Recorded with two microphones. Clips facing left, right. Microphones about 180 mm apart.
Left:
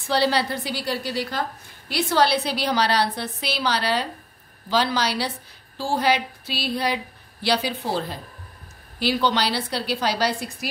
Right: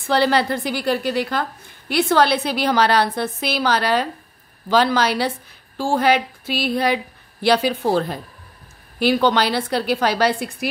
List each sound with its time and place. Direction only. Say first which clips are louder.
0.1 s a woman's voice: right 4 dB; 55° right (ahead or behind)